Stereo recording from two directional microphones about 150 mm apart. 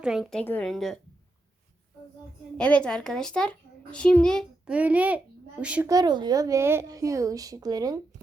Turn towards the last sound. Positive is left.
turn(degrees=-25)  # may be behind; listen again after turning